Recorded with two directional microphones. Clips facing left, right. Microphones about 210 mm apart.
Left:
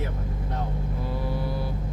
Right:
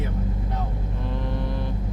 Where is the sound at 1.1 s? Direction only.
5° left (ahead or behind).